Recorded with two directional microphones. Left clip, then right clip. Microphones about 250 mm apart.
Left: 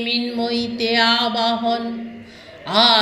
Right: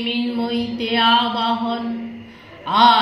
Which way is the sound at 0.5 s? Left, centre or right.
Left.